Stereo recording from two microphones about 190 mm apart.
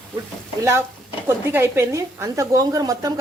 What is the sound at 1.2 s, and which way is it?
A woman's voice, 15° right (ahead or behind).